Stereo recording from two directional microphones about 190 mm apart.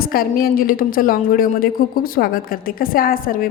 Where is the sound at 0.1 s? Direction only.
50° left (ahead or behind).